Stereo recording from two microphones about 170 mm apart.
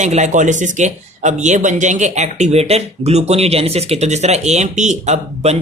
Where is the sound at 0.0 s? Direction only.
45° right (ahead or behind).